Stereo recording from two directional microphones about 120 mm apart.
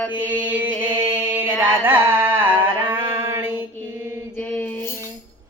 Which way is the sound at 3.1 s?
20° right (ahead or behind).